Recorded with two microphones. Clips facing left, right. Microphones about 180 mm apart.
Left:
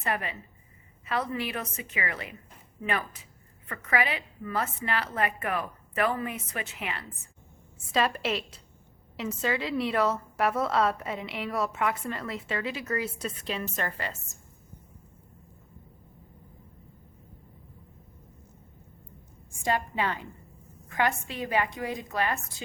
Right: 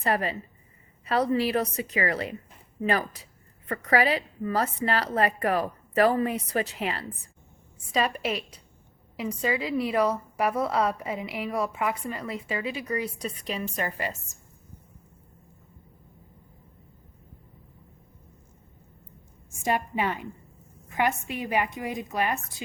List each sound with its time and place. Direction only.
0.0 s a woman's voice: 35° right (ahead or behind)
9.2 s a woman's voice: centre (ahead or behind)
13.7 s a woman's voice: 15° right (ahead or behind)
19.6 s a woman's voice: 20° right (ahead or behind)